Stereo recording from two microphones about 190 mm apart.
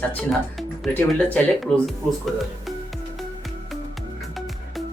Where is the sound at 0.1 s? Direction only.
5° left (ahead or behind).